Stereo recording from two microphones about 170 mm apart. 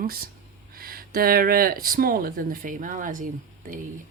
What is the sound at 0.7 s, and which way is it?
Speech, 60° right (ahead or behind).